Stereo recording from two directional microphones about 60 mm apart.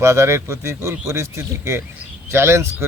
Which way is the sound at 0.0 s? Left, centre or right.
Right.